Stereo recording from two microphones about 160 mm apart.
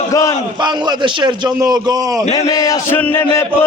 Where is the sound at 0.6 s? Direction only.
30° right (ahead or behind).